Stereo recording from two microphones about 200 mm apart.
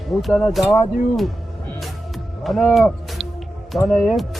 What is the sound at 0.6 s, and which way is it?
Speech, 20° left (ahead or behind).